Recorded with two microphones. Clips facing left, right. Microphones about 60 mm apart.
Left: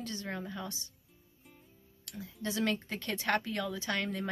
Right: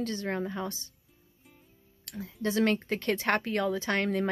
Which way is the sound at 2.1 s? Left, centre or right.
Right.